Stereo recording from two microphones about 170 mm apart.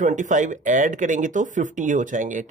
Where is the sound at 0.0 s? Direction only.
50° right (ahead or behind).